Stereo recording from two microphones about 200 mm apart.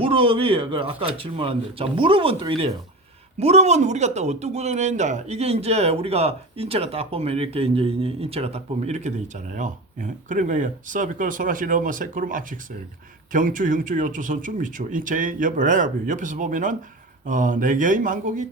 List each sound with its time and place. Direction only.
0.0 s a man's voice: 25° right (ahead or behind)